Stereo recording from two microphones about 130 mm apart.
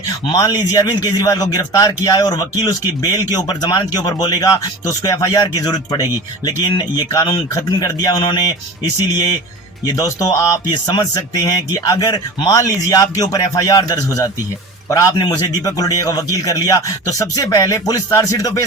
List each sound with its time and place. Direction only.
0.3 s a man's voice: 35° left (ahead or behind)